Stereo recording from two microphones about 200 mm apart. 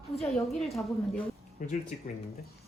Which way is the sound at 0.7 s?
Centre (ahead or behind).